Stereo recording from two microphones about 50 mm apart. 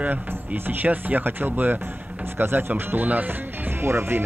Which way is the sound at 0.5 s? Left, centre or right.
Right.